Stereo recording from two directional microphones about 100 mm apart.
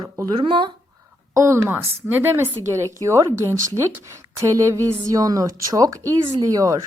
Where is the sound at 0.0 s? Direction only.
40° right (ahead or behind).